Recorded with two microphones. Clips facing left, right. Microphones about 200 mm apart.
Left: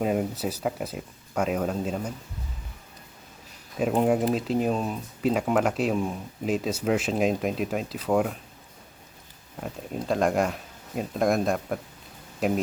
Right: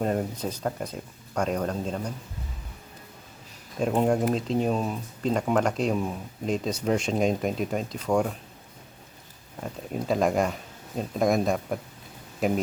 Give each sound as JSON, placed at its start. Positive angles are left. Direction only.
{"t": 0.0, "sound": "speech", "side_deg": 5}
{"t": 3.8, "sound": "speech", "side_deg": 5}
{"t": 9.6, "sound": "speech", "side_deg": 0}